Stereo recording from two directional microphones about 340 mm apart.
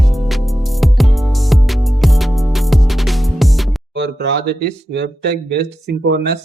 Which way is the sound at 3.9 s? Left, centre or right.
Right.